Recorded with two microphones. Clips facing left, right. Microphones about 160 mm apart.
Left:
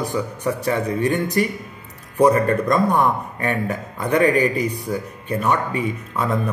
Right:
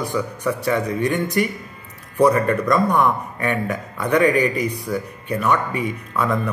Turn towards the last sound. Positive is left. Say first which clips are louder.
# even
turn(degrees=35)  # may be behind; listen again after turning